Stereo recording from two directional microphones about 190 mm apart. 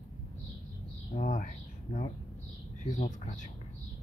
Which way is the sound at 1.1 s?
45° left (ahead or behind).